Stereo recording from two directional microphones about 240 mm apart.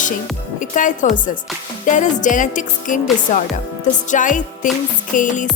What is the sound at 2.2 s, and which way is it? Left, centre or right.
Speech, left.